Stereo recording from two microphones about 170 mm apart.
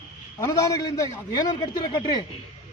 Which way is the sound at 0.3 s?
20° left (ahead or behind).